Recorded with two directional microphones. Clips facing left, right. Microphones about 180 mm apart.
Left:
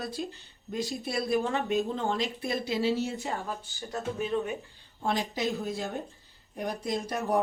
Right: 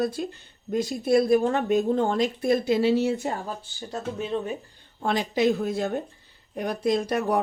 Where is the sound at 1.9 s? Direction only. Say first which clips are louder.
Right 7 dB; 50° right (ahead or behind).